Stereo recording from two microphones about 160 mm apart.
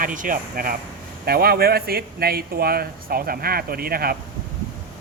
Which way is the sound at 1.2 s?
75° right (ahead or behind).